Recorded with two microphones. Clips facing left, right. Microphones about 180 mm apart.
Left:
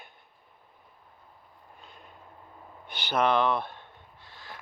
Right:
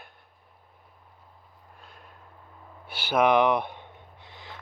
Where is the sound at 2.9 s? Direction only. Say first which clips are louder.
Right 4 dB; 10° right (ahead or behind).